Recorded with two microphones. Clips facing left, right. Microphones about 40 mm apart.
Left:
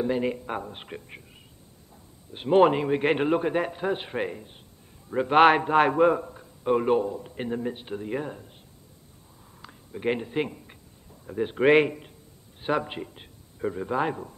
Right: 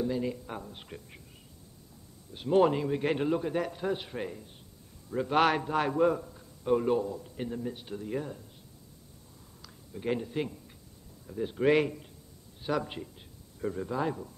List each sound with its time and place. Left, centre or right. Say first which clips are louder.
0.0 s a man's voice: left 5 dB; left
2.3 s a man's voice: left 5 dB; left
9.6 s a sound: left 6 dB; left
11.2 s a man's voice: left 5 dB; left
13.9 s a man's voice: left 6 dB; left